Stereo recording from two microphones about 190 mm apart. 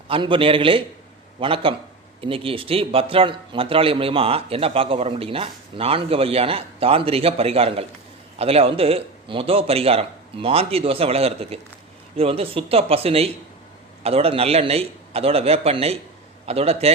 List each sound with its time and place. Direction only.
0.1 s speech: 25° right (ahead or behind)